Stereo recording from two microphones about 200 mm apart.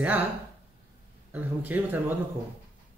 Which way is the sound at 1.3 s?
10° right (ahead or behind).